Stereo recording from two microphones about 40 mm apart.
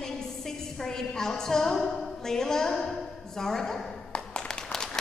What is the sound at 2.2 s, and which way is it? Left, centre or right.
A woman's voice, centre.